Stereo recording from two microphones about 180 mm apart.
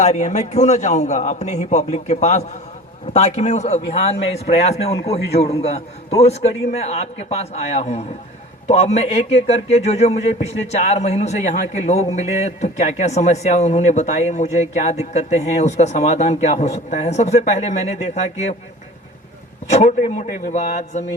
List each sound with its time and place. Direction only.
0.0 s speech: 40° left (ahead or behind)
19.7 s speech: 40° left (ahead or behind)